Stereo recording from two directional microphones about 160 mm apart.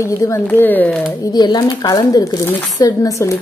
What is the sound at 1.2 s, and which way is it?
Speech, 25° left (ahead or behind).